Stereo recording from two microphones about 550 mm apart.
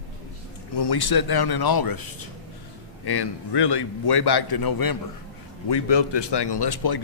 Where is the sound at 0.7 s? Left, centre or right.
Left.